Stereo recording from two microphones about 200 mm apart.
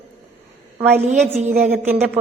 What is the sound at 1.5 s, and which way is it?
Speech, 5° right (ahead or behind).